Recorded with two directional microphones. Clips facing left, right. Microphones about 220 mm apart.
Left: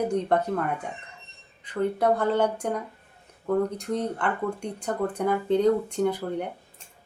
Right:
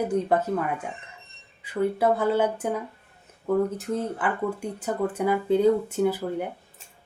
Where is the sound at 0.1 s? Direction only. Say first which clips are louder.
Right 1 dB; 5° right (ahead or behind).